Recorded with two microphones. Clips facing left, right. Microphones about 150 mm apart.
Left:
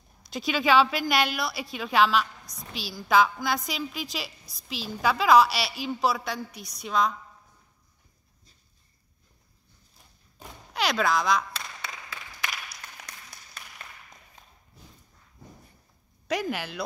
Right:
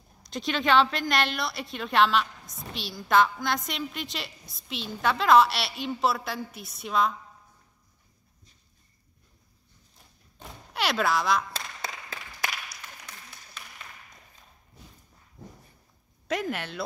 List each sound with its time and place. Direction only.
0.2 s a woman's voice: 5° left (ahead or behind)
10.7 s speech: 5° right (ahead or behind)
11.8 s a sound: 30° right (ahead or behind)
16.3 s a woman's voice: centre (ahead or behind)